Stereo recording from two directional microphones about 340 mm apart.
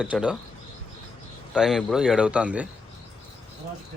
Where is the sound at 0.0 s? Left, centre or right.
Centre.